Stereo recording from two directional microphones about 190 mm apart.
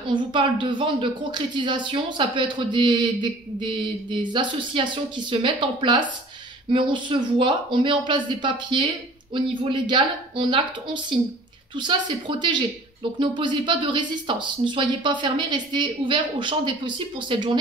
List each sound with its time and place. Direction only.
0.1 s speech: 25° right (ahead or behind)